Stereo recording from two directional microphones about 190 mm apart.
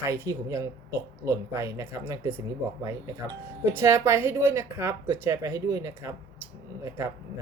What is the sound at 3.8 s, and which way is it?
Speech, 15° right (ahead or behind).